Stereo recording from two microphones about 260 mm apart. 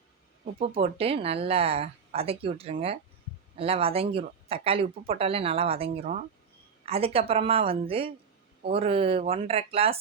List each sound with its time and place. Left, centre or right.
0.6 s speech: right